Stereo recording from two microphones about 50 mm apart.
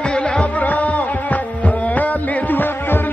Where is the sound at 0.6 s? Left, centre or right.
Left.